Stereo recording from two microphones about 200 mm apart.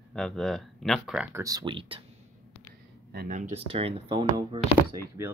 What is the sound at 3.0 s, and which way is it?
Speech, 45° right (ahead or behind).